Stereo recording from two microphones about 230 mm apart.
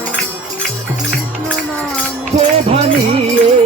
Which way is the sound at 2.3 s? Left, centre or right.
Right.